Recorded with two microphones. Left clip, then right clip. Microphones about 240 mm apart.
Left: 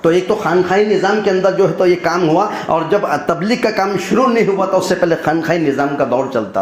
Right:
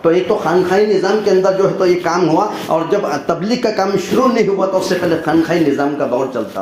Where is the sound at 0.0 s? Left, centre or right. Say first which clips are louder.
Even; left.